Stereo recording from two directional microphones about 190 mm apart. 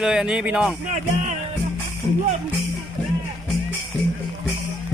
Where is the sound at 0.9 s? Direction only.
40° right (ahead or behind).